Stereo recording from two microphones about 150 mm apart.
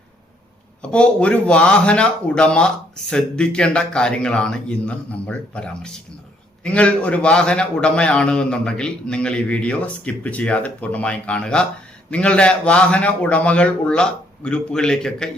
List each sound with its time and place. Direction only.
0.8 s a man's voice: 5° left (ahead or behind)